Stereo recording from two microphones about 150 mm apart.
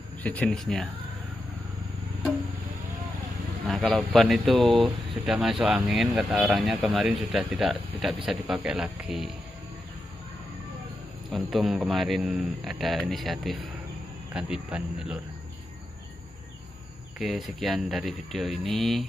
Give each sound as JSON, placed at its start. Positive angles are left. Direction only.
{"t": 0.2, "sound": "speech", "side_deg": 10}
{"t": 3.6, "sound": "a man's voice", "side_deg": 0}
{"t": 4.6, "sound": "speech", "side_deg": -35}
{"t": 4.8, "sound": "speech", "side_deg": -5}
{"t": 11.5, "sound": "speech", "side_deg": 0}
{"t": 17.2, "sound": "speech", "side_deg": 0}